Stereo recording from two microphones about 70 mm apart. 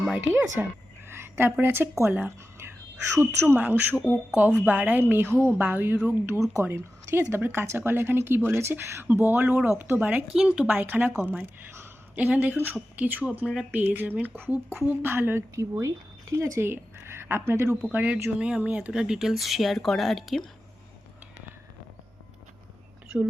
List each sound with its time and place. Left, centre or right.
0.6 s speech: centre
1.0 s a sound: right
1.6 s a woman's voice: right
4.0 s speech: left
4.5 s a woman's voice: right
10.3 s speech: centre
10.8 s a woman's voice: right
17.9 s a woman's voice: right; by 20.4 s centre
23.0 s speech: centre